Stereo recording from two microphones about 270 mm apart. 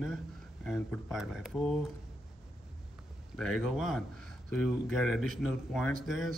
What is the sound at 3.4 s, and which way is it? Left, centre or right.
Speech, centre.